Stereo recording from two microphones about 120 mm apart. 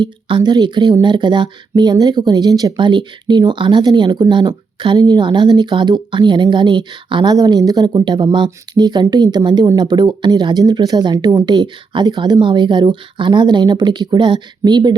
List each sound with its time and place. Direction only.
0.0 s speech: 40° right (ahead or behind)